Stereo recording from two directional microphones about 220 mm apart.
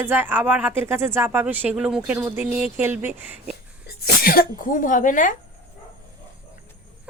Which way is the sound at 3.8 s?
45° left (ahead or behind).